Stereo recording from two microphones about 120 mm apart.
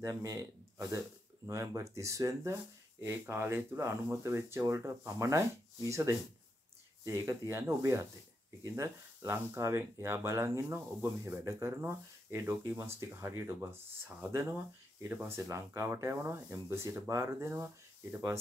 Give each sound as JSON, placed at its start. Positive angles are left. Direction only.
{"t": 0.0, "sound": "speech", "side_deg": -30}